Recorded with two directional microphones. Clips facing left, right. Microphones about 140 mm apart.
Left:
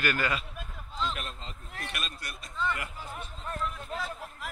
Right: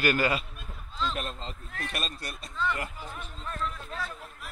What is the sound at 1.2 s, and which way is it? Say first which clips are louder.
A man's voice: right 5 dB; 30° right (ahead or behind).